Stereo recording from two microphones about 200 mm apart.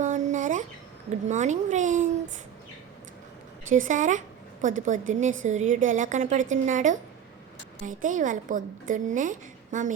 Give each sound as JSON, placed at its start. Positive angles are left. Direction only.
{"t": 0.0, "sound": "a sound", "side_deg": -40}
{"t": 1.3, "sound": "a woman's voice", "side_deg": -35}
{"t": 3.7, "sound": "a woman's voice", "side_deg": -40}